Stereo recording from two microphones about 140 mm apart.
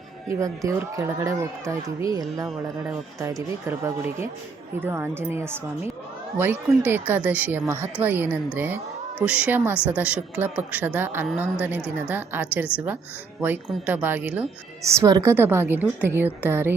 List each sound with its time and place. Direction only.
0.3 s speech: 25° right (ahead or behind)
14.8 s speech: 25° right (ahead or behind)